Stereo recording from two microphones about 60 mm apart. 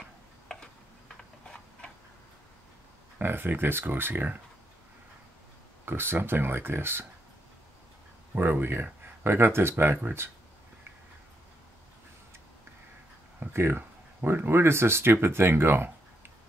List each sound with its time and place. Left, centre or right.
3.2 s speech: right
5.9 s speech: right
8.4 s speech: right
13.4 s speech: right